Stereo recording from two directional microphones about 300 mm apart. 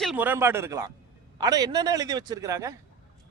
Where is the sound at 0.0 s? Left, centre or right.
Centre.